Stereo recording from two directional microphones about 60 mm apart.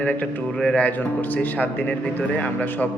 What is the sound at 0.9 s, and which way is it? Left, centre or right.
A man's voice, left.